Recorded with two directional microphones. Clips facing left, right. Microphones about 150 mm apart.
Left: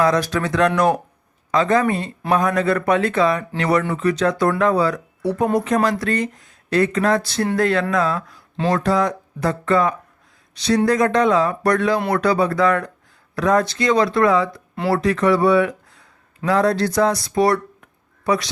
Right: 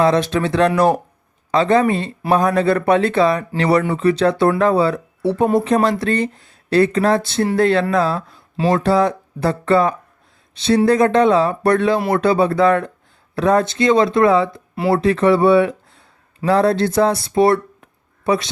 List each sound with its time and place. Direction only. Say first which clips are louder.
0.0 s speech: right 3 dB; 25° right (ahead or behind)